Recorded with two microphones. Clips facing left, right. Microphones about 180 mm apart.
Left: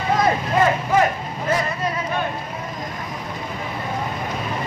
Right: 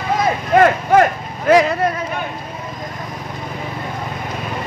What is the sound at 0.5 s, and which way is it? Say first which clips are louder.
Speech: right 8 dB; 70° right (ahead or behind).